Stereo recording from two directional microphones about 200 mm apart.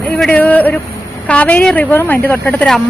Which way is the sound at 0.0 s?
10° left (ahead or behind).